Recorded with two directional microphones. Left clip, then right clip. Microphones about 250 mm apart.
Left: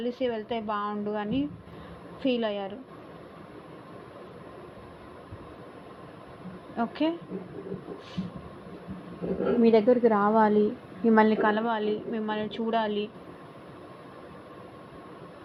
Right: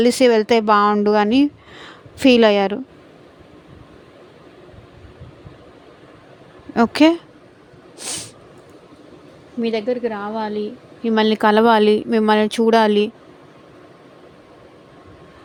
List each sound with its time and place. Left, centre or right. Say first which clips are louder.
0.0 s a woman's voice: right 16 dB; right
6.7 s a woman's voice: right 15 dB; right
7.9 s a sound: right 10 dB; right
9.6 s a woman's voice: even; centre
11.0 s speech: right 3 dB; right
11.3 s a woman's voice: right 12 dB; right